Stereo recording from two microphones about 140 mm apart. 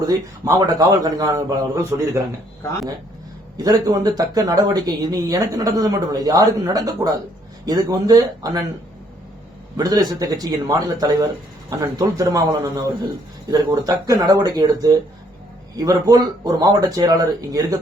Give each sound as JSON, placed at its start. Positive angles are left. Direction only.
{"t": 0.4, "sound": "speech", "side_deg": -25}
{"t": 3.6, "sound": "speech", "side_deg": -25}
{"t": 9.7, "sound": "speech", "side_deg": -25}